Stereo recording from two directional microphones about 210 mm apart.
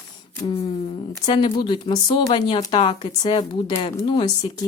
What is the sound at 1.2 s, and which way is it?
Speech, 25° left (ahead or behind).